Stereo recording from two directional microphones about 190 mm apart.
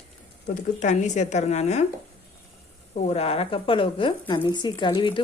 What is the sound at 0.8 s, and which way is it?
Speech, 40° left (ahead or behind).